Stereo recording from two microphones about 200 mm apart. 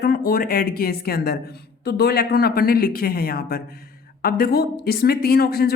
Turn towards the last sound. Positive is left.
turn(degrees=50)  # may be behind; listen again after turning